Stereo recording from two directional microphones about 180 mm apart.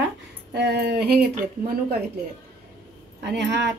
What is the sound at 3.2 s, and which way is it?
Speech, 70° right (ahead or behind).